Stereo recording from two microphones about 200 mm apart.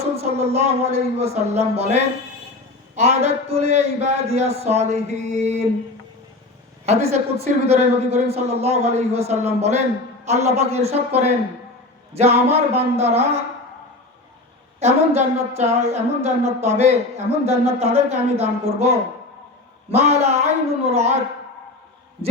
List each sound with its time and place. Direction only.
0.2 s a woman's voice: 30° right (ahead or behind)
6.8 s a woman's voice: 35° right (ahead or behind)
12.5 s a woman's voice: 30° right (ahead or behind)
14.8 s a woman's voice: 35° right (ahead or behind)